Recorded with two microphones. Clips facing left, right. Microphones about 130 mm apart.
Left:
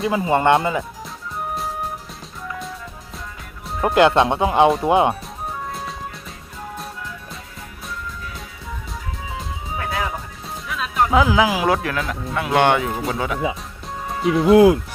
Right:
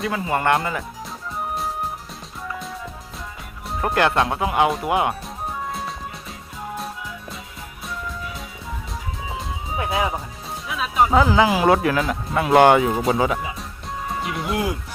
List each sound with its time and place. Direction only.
0.0 s speech: 25° left (ahead or behind)
2.5 s music: centre (ahead or behind)
3.8 s speech: 20° left (ahead or behind)
9.7 s music: 20° right (ahead or behind)
10.7 s speech: 5° right (ahead or behind)
14.1 s music: centre (ahead or behind)